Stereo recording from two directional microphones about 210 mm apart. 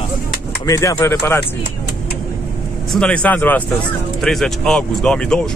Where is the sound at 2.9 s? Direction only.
5° left (ahead or behind).